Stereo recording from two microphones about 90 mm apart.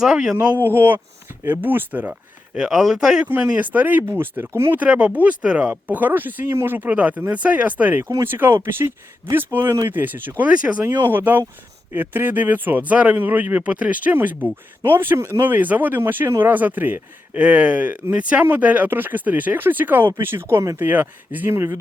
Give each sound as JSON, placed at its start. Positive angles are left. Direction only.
{"t": 0.0, "sound": "speech", "side_deg": -5}
{"t": 0.6, "sound": "speech", "side_deg": -25}
{"t": 2.6, "sound": "speech", "side_deg": -5}
{"t": 3.2, "sound": "speech", "side_deg": -20}
{"t": 4.8, "sound": "speech", "side_deg": -15}
{"t": 20.7, "sound": "speech", "side_deg": -20}